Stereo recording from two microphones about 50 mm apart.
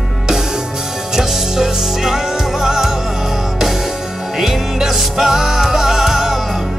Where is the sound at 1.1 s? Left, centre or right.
Centre.